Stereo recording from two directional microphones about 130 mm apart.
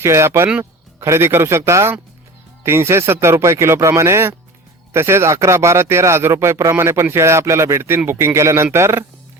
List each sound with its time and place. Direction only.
0.0 s speech: 20° right (ahead or behind)